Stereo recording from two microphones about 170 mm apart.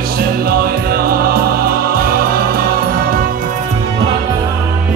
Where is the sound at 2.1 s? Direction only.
60° right (ahead or behind).